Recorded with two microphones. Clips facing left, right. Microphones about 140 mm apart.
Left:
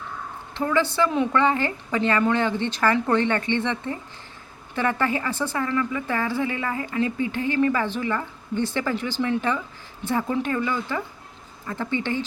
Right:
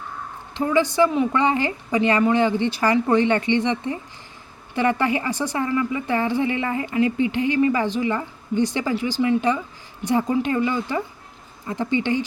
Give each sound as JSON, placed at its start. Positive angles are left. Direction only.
{"t": 0.5, "sound": "speech", "side_deg": -15}